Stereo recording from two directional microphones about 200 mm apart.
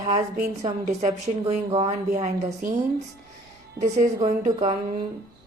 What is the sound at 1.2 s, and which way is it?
Speech, 30° right (ahead or behind).